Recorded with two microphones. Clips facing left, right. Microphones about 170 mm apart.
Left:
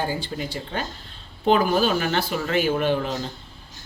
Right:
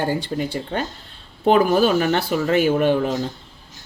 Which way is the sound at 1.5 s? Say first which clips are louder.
Right 4 dB; 45° right (ahead or behind).